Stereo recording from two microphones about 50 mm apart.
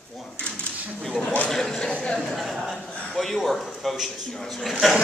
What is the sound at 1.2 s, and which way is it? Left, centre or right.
Speech, left.